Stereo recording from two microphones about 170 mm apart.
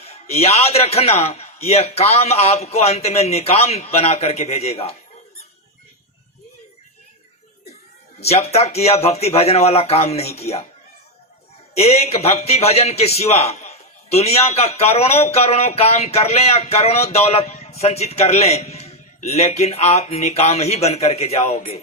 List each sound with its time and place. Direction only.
0.0 s a man's voice: 40° left (ahead or behind)
8.2 s a man's voice: 40° left (ahead or behind)
11.7 s a man's voice: 40° left (ahead or behind)